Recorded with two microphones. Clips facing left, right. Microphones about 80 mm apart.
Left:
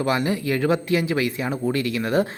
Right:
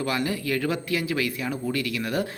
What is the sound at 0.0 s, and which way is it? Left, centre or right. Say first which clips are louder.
Speech: left 4 dB; left.